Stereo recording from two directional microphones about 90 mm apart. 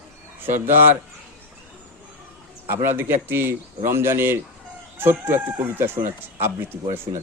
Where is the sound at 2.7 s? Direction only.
25° right (ahead or behind).